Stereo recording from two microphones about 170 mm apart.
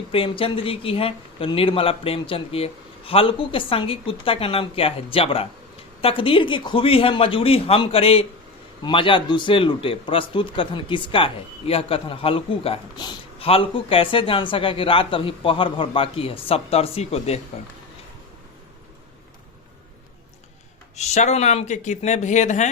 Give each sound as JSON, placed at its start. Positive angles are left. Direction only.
{"t": 0.1, "sound": "a man's voice", "side_deg": 30}
{"t": 20.9, "sound": "speech", "side_deg": 40}